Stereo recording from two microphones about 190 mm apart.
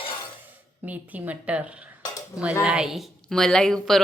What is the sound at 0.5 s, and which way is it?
A woman's voice, 10° right (ahead or behind).